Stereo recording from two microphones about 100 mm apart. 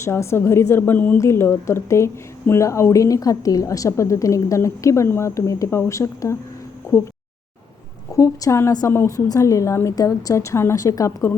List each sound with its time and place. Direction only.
0.0 s a woman's voice: 25° left (ahead or behind)
8.1 s a woman's voice: 35° left (ahead or behind)